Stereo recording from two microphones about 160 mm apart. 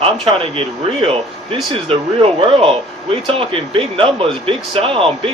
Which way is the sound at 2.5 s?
35° right (ahead or behind).